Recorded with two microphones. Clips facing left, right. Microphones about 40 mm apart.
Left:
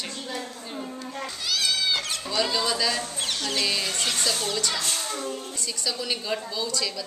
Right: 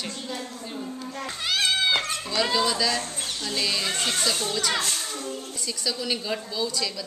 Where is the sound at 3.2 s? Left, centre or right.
Left.